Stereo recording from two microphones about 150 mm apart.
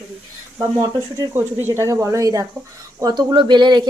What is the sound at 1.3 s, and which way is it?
Speech, 15° right (ahead or behind).